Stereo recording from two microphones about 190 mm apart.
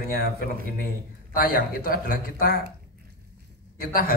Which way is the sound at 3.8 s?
50° left (ahead or behind).